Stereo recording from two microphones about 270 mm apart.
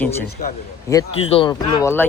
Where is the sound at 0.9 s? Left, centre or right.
Centre.